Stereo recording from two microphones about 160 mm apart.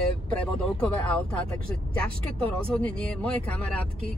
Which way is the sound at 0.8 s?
10° left (ahead or behind).